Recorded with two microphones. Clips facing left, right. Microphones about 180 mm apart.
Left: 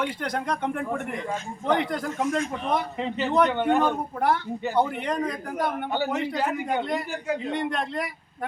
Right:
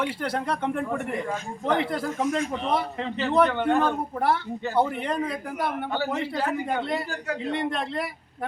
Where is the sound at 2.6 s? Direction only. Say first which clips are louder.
Even; 30° right (ahead or behind).